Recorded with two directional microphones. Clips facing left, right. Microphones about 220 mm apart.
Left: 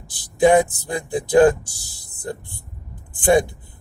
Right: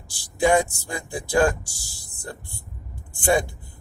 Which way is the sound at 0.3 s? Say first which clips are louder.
Left 5 dB; 20° left (ahead or behind).